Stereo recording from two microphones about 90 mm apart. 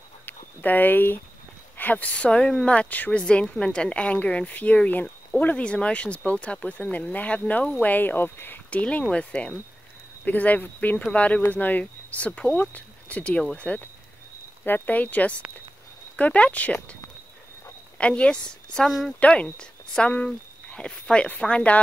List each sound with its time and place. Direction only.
0.2 s speech: 20° left (ahead or behind)
17.9 s speech: 15° left (ahead or behind)
19.1 s speech: 15° left (ahead or behind)